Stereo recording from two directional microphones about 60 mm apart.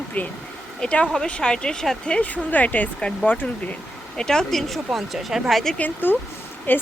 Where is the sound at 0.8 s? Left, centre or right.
Centre.